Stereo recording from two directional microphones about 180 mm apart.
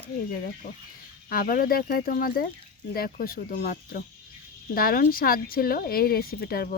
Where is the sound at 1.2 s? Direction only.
55° left (ahead or behind).